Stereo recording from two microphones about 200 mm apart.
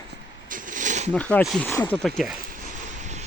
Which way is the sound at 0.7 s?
40° right (ahead or behind).